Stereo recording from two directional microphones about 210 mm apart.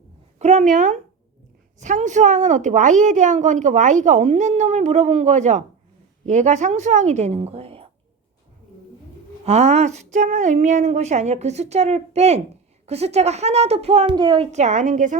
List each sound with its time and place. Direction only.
0.3 s a woman's voice: 30° right (ahead or behind)
9.4 s a woman's voice: 30° right (ahead or behind)